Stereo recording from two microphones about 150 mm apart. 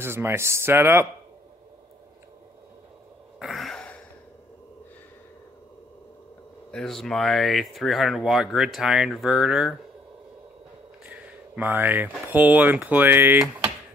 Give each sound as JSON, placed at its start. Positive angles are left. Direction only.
{"t": 0.0, "sound": "speech", "side_deg": -15}
{"t": 3.3, "sound": "throat clearing", "side_deg": 0}
{"t": 6.7, "sound": "speech", "side_deg": 5}
{"t": 11.1, "sound": "speech", "side_deg": -10}